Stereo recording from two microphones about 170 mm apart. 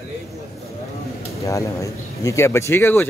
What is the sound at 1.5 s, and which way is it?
Speech, 20° left (ahead or behind).